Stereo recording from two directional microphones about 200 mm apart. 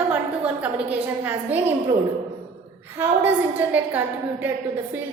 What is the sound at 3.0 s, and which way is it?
A woman's voice, 10° right (ahead or behind).